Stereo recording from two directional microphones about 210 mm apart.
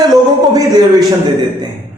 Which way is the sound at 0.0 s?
20° right (ahead or behind).